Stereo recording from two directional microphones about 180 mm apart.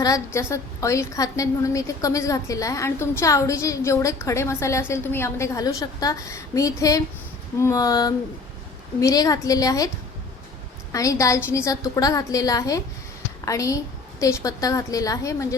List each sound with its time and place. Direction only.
0.3 s a woman's voice: 15° left (ahead or behind)
10.9 s a woman's voice: 20° left (ahead or behind)